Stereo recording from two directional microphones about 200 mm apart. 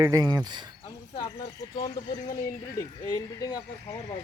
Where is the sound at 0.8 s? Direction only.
25° left (ahead or behind).